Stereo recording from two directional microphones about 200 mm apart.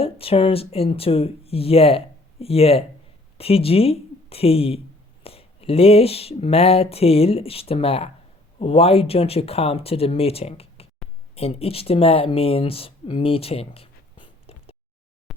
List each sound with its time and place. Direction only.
0.0 s speech: 30° left (ahead or behind)